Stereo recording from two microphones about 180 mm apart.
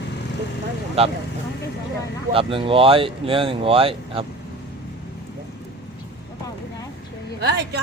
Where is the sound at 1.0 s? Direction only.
35° right (ahead or behind).